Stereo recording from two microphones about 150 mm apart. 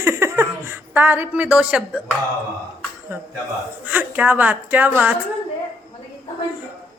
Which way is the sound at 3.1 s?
15° right (ahead or behind).